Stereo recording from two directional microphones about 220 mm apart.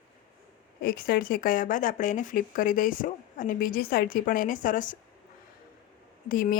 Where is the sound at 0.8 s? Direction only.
40° left (ahead or behind).